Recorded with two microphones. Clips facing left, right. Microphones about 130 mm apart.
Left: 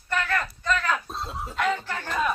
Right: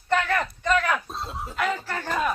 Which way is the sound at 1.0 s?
Centre (ahead or behind).